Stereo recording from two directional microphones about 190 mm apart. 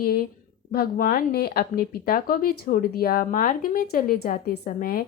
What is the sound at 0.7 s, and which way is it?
Speech, 50° left (ahead or behind).